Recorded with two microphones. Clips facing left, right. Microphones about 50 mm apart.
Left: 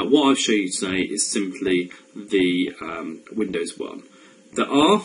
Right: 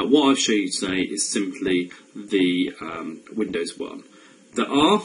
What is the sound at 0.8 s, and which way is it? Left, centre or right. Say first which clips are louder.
Speech: even; centre.